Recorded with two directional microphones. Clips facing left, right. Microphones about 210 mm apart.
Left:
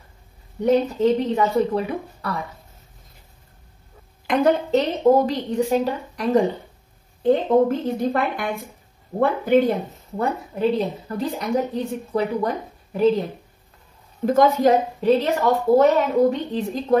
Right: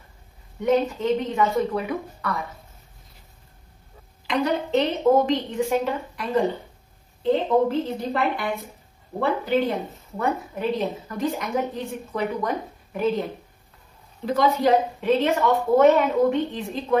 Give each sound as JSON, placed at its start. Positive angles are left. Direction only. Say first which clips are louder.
{"t": 0.6, "sound": "a woman's voice", "louder": "left 3 dB", "side_deg": 35}
{"t": 4.3, "sound": "a woman's voice", "louder": "left 5 dB", "side_deg": 40}
{"t": 7.2, "sound": "a woman's voice", "louder": "left 3 dB", "side_deg": 50}
{"t": 10.1, "sound": "a woman's voice", "louder": "left 1 dB", "side_deg": 35}
{"t": 14.2, "sound": "a woman's voice", "louder": "left 4 dB", "side_deg": 50}